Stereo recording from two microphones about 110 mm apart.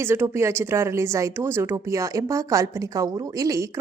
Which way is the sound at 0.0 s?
20° right (ahead or behind).